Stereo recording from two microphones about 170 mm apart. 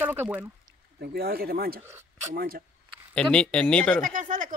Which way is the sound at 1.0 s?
65° right (ahead or behind).